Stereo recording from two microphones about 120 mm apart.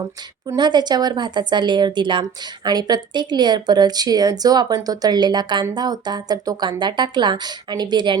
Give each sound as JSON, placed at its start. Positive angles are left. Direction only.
{"t": 0.4, "sound": "speech", "side_deg": -35}